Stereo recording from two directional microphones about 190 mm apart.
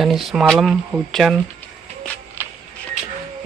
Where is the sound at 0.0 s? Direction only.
Centre (ahead or behind).